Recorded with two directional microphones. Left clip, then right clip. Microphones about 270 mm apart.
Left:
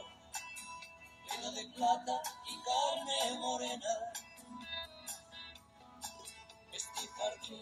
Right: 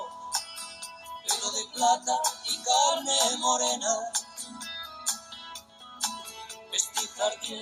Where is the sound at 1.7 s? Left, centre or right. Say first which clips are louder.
Right 8 dB; right.